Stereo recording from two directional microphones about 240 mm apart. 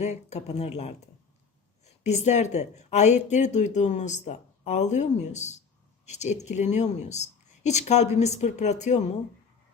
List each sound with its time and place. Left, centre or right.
0.0 s a woman's voice: left